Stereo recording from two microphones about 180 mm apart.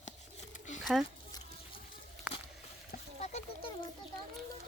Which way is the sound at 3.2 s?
35° left (ahead or behind).